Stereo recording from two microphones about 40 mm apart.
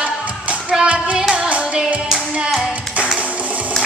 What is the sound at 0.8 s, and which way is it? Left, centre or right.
Child singing, right.